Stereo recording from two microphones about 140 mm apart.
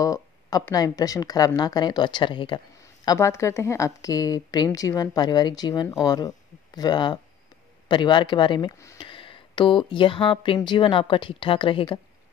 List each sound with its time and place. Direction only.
0.0 s speech: 25° left (ahead or behind)
2.8 s a woman's voice: 20° left (ahead or behind); by 12.0 s 40° left (ahead or behind)